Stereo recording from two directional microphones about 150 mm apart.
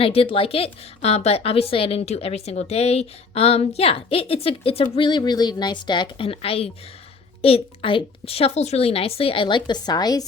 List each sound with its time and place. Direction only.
0.0 s a woman's voice: 40° left (ahead or behind)